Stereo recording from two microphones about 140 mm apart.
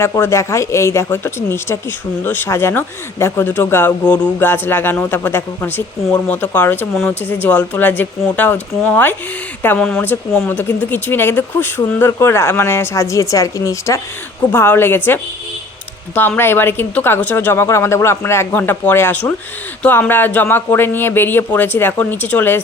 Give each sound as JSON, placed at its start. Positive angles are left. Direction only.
{"t": 0.0, "sound": "a woman's voice", "side_deg": 20}